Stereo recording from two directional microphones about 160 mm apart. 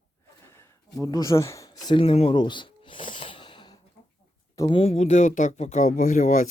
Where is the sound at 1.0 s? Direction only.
25° left (ahead or behind).